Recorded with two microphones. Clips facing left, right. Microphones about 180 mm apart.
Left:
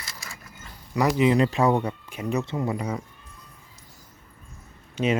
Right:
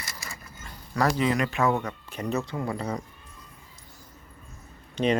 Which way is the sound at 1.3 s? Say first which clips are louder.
Left 4 dB; 30° left (ahead or behind).